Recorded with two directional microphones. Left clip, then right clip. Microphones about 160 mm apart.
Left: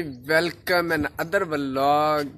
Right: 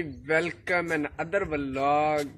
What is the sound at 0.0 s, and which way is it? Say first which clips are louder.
Speech: left 4 dB; 15° left (ahead or behind).